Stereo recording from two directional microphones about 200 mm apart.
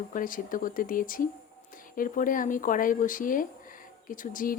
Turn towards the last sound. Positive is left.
turn(degrees=45)  # may be behind; listen again after turning